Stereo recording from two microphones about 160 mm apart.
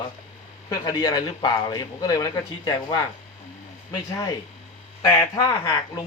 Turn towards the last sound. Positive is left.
turn(degrees=25)  # may be behind; listen again after turning